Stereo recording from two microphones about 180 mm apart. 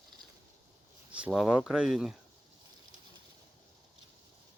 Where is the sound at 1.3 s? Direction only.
Centre (ahead or behind).